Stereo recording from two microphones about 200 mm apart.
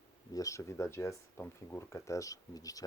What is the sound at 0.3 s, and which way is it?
Speech, 15° left (ahead or behind).